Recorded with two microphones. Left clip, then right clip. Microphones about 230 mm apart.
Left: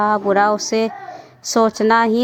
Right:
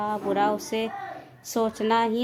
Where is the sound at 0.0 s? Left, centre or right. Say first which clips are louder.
Left 10 dB; left.